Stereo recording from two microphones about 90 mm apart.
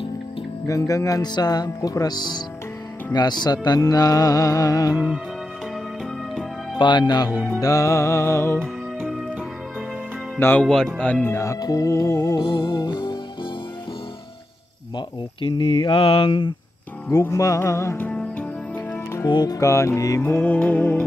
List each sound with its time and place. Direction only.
0.7 s music: 40° left (ahead or behind)
4.9 s music: 10° right (ahead or behind)
6.8 s speech: 55° left (ahead or behind)
7.2 s music: 20° right (ahead or behind)
7.6 s music: 35° left (ahead or behind)
10.6 s speech: 5° left (ahead or behind)
11.2 s music: 30° left (ahead or behind)
12.4 s speech: 55° left (ahead or behind)
12.7 s music: 55° left (ahead or behind)
15.5 s mantra: 60° left (ahead or behind); by 16.5 s 80° left
17.2 s music: 35° left (ahead or behind)
18.1 s music: 15° left (ahead or behind)
19.2 s music: 50° left (ahead or behind)
20.2 s music: 20° left (ahead or behind)